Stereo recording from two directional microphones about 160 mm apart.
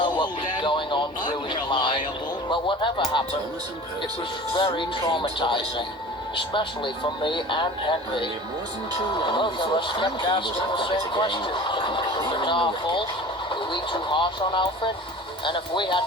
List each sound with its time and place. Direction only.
0.0 s music: 30° left (ahead or behind)
1.3 s a sound: 30° left (ahead or behind)
2.5 s speech: 30° left (ahead or behind)
4.5 s speech: 30° left (ahead or behind)